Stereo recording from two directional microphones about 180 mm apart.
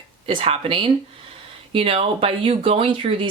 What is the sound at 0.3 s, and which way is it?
Speech, 30° right (ahead or behind).